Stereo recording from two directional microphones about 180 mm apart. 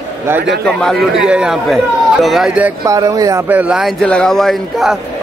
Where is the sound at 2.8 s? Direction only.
20° right (ahead or behind).